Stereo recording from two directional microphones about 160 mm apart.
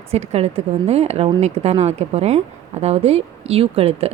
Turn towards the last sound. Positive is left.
turn(degrees=-40)  # may be behind; listen again after turning